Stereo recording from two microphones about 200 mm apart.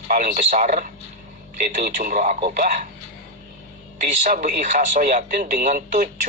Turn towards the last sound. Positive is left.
turn(degrees=-40)  # may be behind; listen again after turning